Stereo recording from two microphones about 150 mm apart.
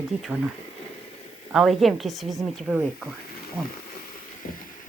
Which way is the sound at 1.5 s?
Centre (ahead or behind).